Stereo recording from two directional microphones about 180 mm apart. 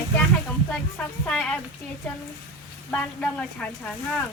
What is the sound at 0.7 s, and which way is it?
Speech, 5° left (ahead or behind).